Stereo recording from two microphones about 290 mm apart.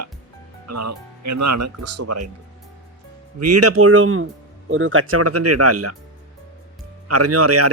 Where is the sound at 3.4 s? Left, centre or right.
Right.